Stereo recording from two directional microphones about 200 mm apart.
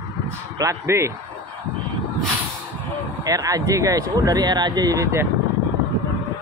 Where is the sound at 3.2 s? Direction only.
20° right (ahead or behind).